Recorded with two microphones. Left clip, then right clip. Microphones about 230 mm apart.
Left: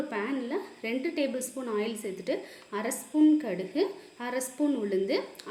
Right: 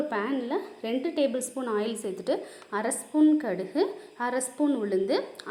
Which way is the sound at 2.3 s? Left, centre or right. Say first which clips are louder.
Right 4 dB; centre.